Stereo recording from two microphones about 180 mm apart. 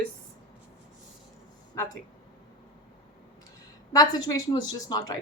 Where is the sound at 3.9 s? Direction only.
20° left (ahead or behind).